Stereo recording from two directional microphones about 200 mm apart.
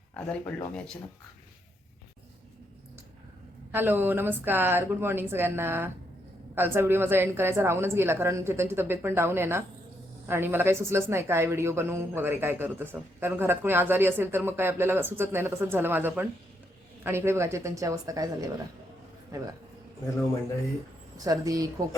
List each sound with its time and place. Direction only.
0.1 s speech: 5° left (ahead or behind)
3.7 s speech: 10° right (ahead or behind)
21.2 s speech: 15° right (ahead or behind)